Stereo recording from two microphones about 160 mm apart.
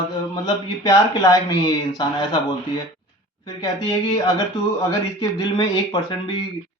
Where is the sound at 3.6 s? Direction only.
25° left (ahead or behind).